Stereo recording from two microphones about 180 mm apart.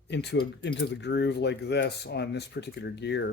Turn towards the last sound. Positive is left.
turn(degrees=70)  # may be behind; listen again after turning